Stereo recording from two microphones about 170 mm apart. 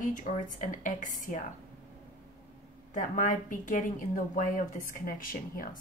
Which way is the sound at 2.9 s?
50° left (ahead or behind).